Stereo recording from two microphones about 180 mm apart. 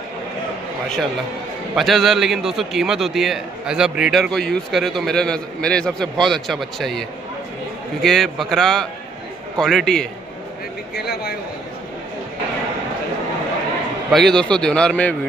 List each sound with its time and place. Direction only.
1.8 s a man's voice: centre (ahead or behind)
11.0 s a man's voice: 60° left (ahead or behind)
14.1 s a man's voice: 5° left (ahead or behind)